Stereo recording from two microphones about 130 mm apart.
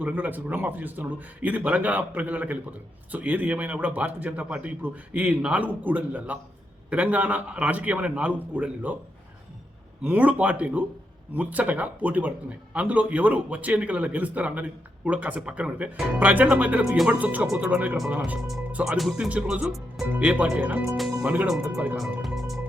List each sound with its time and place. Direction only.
0.0 s a man's voice: 15° right (ahead or behind)
10.0 s a man's voice: 15° right (ahead or behind)
18.3 s a man's voice: centre (ahead or behind)
21.6 s a man's voice: 20° right (ahead or behind)
22.2 s music: centre (ahead or behind)